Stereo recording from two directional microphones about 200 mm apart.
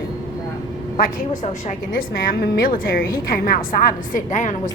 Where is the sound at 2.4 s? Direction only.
45° left (ahead or behind).